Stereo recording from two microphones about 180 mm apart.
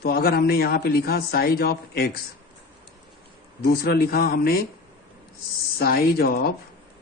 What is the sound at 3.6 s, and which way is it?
A man's voice, 60° left (ahead or behind).